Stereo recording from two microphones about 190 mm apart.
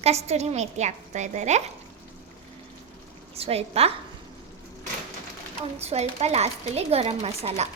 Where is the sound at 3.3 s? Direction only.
30° right (ahead or behind).